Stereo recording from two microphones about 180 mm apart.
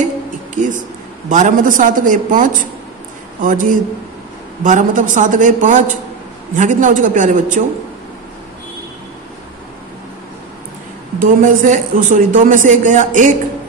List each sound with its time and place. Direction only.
0.6 s a woman's voice: 45° right (ahead or behind)
11.1 s a woman's voice: 45° right (ahead or behind)